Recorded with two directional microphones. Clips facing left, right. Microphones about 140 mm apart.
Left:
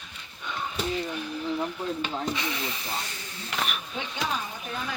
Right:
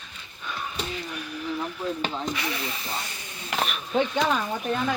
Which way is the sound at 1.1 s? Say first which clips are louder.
Left 3 dB; 25° left (ahead or behind).